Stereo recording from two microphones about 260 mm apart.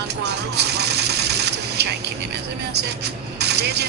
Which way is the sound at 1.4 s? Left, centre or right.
Right.